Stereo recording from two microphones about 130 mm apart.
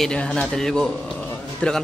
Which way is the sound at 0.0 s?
5° left (ahead or behind).